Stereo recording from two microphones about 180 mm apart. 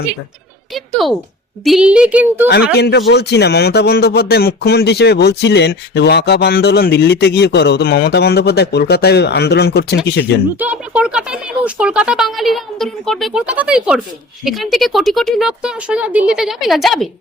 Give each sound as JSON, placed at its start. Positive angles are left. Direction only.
{"t": 0.7, "sound": "speech", "side_deg": 0}
{"t": 2.7, "sound": "speech", "side_deg": 65}
{"t": 10.6, "sound": "speech", "side_deg": -5}